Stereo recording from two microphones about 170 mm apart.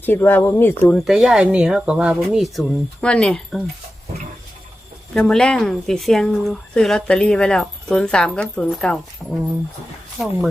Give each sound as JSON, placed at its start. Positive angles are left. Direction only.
{"t": 0.0, "sound": "speech", "side_deg": 10}
{"t": 0.9, "sound": "a woman's voice", "side_deg": 0}
{"t": 5.1, "sound": "a woman's voice", "side_deg": 0}